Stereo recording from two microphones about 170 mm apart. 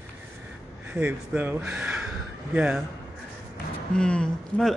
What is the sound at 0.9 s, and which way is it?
A man's voice, 10° right (ahead or behind).